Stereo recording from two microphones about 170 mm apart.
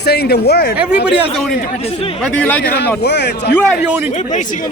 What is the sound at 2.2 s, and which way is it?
Speech, 10° left (ahead or behind).